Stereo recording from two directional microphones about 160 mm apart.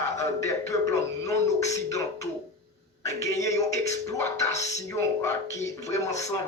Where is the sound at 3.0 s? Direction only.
20° left (ahead or behind).